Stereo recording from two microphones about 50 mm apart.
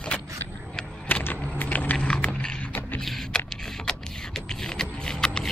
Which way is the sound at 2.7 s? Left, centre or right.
Left.